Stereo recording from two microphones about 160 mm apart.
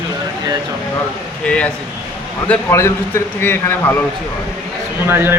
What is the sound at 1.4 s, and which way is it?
A man's voice, 10° left (ahead or behind).